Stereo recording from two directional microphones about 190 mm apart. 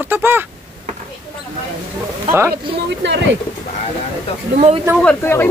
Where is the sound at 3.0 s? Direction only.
70° right (ahead or behind).